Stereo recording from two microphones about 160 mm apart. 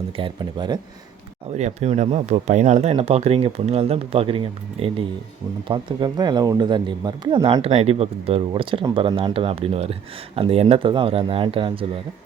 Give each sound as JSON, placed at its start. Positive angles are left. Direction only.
{"t": 0.2, "sound": "speech", "side_deg": -30}
{"t": 1.5, "sound": "speech", "side_deg": -45}